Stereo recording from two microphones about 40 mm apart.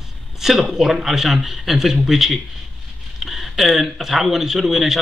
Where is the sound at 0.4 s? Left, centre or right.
Centre.